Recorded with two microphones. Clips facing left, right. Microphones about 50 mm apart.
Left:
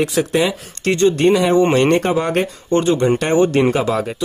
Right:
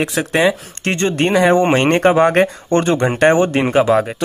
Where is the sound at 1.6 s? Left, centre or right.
Right.